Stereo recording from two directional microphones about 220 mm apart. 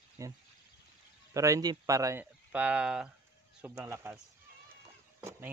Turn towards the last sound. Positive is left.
turn(degrees=-10)  # may be behind; listen again after turning